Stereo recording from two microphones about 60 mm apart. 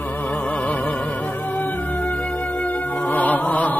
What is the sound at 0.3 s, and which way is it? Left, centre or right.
Music, left.